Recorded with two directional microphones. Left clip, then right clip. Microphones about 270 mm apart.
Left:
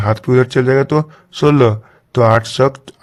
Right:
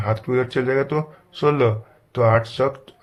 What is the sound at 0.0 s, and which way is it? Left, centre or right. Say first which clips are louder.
Speech: left 8 dB; left.